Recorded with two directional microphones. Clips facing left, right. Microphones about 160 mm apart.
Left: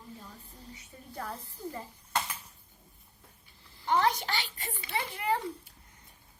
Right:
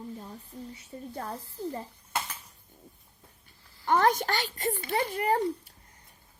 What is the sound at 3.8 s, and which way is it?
Speech, 50° right (ahead or behind).